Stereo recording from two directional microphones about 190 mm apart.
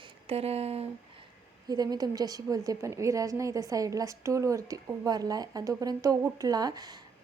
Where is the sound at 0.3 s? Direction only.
35° right (ahead or behind).